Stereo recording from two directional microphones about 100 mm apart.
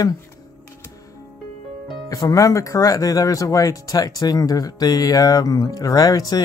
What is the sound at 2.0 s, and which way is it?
Speech, 35° left (ahead or behind).